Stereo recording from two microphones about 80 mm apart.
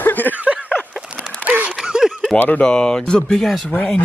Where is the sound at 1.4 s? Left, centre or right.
Centre.